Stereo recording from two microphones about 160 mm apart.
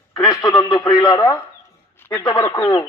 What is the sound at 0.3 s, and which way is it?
A man's voice, 25° left (ahead or behind).